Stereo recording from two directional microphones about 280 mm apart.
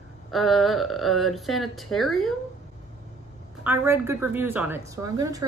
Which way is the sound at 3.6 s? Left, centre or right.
Centre.